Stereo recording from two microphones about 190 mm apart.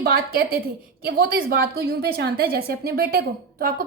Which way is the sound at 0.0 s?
50° right (ahead or behind).